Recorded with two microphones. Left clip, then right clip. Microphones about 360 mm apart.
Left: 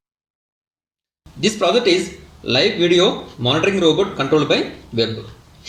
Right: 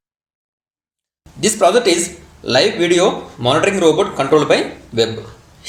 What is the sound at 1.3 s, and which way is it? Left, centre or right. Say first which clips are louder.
Speech: right 4 dB; centre.